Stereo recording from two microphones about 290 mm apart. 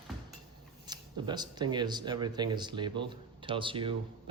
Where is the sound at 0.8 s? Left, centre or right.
Centre.